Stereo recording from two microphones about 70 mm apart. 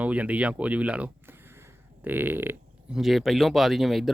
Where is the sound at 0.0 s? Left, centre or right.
Centre.